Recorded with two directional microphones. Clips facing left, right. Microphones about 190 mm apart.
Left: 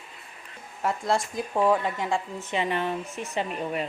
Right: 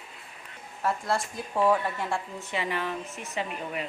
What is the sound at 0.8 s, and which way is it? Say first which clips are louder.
A woman's voice: left 2 dB; 15° left (ahead or behind).